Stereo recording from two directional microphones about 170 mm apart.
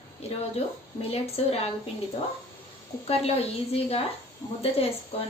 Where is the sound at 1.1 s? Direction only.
35° left (ahead or behind).